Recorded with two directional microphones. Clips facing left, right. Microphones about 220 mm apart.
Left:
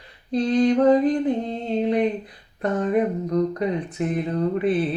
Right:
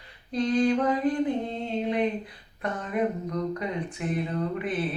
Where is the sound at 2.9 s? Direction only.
35° left (ahead or behind).